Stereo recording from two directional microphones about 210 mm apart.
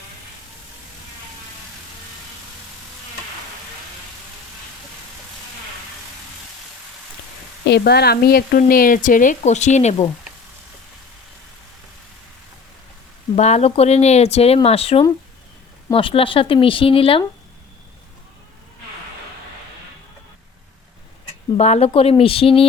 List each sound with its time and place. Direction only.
7.7 s a woman's voice: 50° left (ahead or behind); by 10.1 s 35° left (ahead or behind)
13.3 s speech: 30° left (ahead or behind)
21.6 s a woman's voice: 30° left (ahead or behind)